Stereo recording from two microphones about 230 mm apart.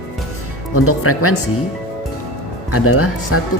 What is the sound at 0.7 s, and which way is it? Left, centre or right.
Speech, left.